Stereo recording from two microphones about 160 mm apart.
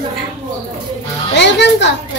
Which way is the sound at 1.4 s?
90° left.